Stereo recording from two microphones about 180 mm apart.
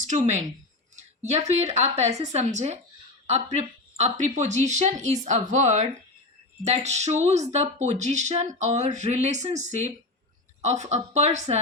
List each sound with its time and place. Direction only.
0.0 s speech: 40° right (ahead or behind)